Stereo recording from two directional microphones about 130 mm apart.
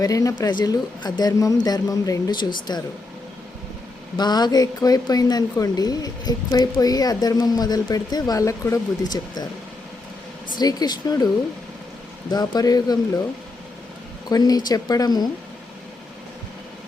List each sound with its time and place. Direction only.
0.0 s speech: 25° left (ahead or behind)
4.2 s speech: 35° left (ahead or behind)
10.6 s speech: 30° left (ahead or behind)
12.3 s speech: 30° left (ahead or behind)
14.3 s speech: 30° left (ahead or behind)